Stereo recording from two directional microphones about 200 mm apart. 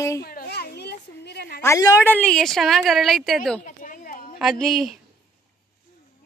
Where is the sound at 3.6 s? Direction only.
40° left (ahead or behind).